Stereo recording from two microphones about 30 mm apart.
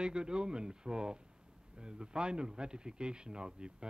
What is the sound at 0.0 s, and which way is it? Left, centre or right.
Speech, right.